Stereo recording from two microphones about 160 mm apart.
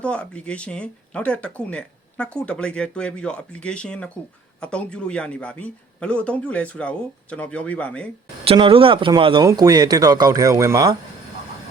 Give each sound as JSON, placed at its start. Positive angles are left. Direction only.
{"t": 0.0, "sound": "speech", "side_deg": 5}
{"t": 8.4, "sound": "speech", "side_deg": -35}